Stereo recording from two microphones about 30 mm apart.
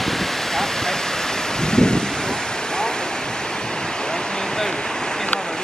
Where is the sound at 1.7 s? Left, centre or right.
Left.